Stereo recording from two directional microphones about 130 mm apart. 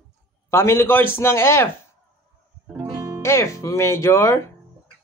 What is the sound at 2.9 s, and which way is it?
Music, 25° right (ahead or behind).